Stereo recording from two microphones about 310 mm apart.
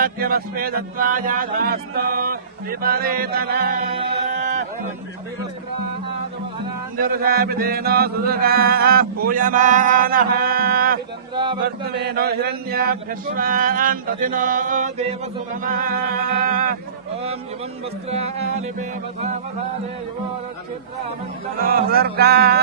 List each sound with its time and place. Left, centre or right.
0.0 s chant: right
3.9 s music: right
6.9 s chant: right
11.3 s speech: centre
11.6 s chant: right
18.1 s chant: right
21.6 s music: right